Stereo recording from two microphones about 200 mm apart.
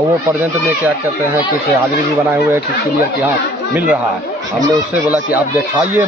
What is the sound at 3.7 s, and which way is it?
Speech, 5° right (ahead or behind).